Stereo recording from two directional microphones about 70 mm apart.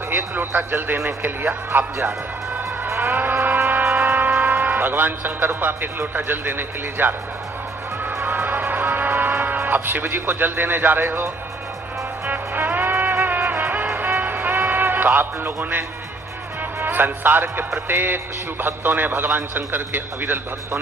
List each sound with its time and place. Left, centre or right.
0.1 s a man's voice: right
2.8 s livestock: right
3.4 s music: right
3.8 s speech: right
8.2 s music: right
12.3 s music: right
16.8 s speech: right
17.7 s music: right
18.6 s a man's voice: right